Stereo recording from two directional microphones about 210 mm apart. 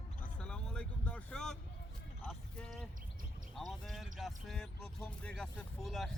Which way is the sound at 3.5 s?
Centre (ahead or behind).